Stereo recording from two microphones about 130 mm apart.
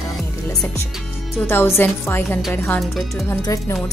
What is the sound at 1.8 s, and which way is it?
A woman's voice, 15° left (ahead or behind).